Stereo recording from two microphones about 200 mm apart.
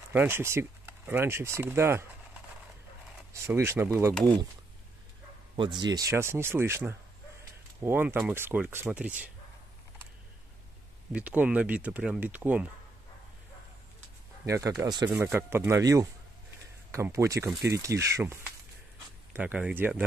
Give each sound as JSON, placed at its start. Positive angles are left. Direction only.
{"t": 0.1, "sound": "speech", "side_deg": -10}
{"t": 3.4, "sound": "speech", "side_deg": -15}
{"t": 4.1, "sound": "speech", "side_deg": 5}
{"t": 5.6, "sound": "speech", "side_deg": -20}
{"t": 11.1, "sound": "speech", "side_deg": -5}
{"t": 14.4, "sound": "speech", "side_deg": -15}